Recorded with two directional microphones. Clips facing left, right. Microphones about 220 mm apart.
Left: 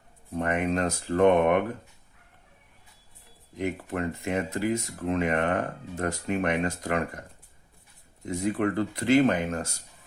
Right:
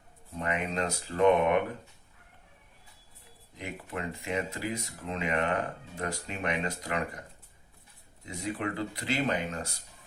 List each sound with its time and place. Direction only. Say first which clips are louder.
0.3 s speech: left 6 dB; 50° left (ahead or behind)
3.6 s speech: left 8 dB; 50° left (ahead or behind)
8.2 s speech: left 8 dB; 50° left (ahead or behind)